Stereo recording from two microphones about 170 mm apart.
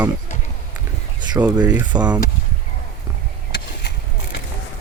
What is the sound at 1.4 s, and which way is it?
Speech, 10° right (ahead or behind).